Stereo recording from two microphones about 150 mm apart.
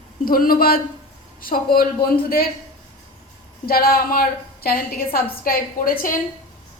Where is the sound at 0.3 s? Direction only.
75° left (ahead or behind).